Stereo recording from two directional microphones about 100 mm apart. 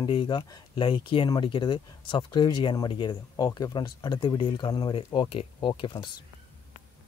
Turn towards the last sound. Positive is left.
turn(degrees=55)  # may be behind; listen again after turning